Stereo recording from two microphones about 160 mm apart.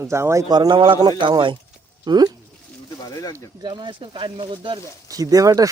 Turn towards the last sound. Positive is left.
turn(degrees=-20)  # may be behind; listen again after turning